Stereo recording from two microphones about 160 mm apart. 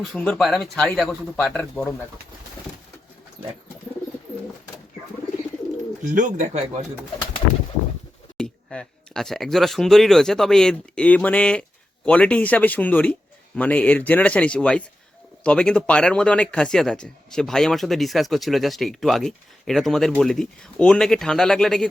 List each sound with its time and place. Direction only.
0.0 s speech: 5° left (ahead or behind)
6.1 s speech: 55° right (ahead or behind)
8.4 s speech: 5° left (ahead or behind)